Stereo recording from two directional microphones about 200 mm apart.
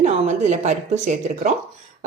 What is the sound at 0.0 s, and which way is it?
Speech, 35° right (ahead or behind).